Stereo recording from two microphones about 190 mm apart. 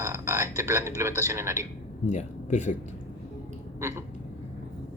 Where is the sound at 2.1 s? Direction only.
40° left (ahead or behind).